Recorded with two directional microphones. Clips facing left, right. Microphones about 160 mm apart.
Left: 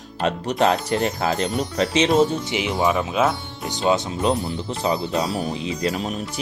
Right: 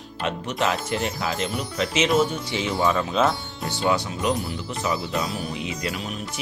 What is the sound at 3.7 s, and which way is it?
Speech, 20° left (ahead or behind).